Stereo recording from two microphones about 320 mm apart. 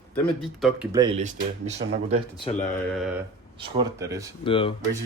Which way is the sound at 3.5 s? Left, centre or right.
Centre.